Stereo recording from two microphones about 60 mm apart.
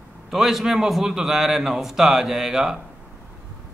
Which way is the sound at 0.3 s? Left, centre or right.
Centre.